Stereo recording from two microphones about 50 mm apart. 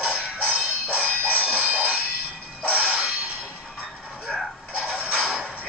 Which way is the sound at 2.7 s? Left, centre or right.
Right.